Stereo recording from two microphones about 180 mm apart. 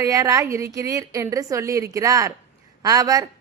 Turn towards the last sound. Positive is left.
turn(degrees=-20)  # may be behind; listen again after turning